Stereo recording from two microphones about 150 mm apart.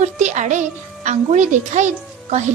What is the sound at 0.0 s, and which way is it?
A woman's voice, 50° right (ahead or behind).